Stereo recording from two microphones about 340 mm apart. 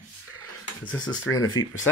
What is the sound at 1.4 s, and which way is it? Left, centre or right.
Speech, left.